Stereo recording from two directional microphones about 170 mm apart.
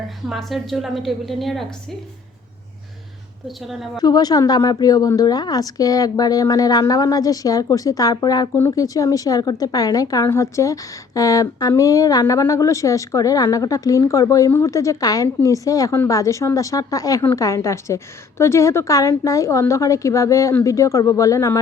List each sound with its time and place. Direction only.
0.3 s a woman's voice: centre (ahead or behind)
3.4 s a woman's voice: centre (ahead or behind)
4.0 s a woman's voice: 25° left (ahead or behind)